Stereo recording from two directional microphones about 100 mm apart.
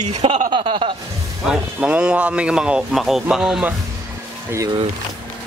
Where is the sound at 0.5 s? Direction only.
55° right (ahead or behind).